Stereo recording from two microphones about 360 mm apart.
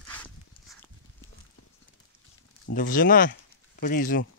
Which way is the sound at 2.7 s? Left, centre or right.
Left.